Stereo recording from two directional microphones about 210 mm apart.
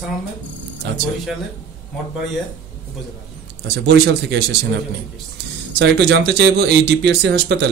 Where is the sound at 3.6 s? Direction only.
50° right (ahead or behind).